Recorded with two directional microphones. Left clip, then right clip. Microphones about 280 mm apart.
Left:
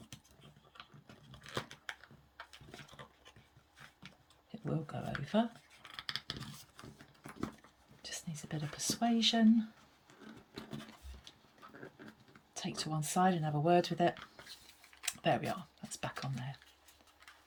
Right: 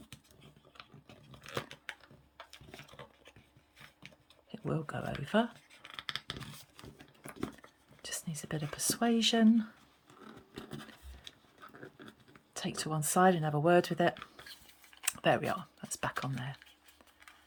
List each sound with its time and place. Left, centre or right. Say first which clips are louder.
0.8 s biting: right 1 dB; centre
4.5 s scissors: right 4 dB; centre
8.0 s speech: right 4 dB; centre
12.5 s speech: right 3 dB; centre
15.0 s a sound: right 4 dB; centre